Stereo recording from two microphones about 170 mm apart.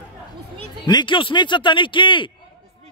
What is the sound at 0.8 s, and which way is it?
Speech, 25° left (ahead or behind).